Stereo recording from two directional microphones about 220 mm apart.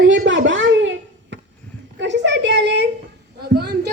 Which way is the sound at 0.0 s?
60° right (ahead or behind).